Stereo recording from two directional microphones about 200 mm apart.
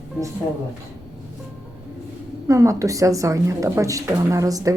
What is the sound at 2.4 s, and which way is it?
A woman's voice, 15° right (ahead or behind).